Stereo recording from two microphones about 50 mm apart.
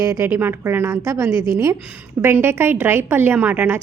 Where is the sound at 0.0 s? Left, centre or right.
Right.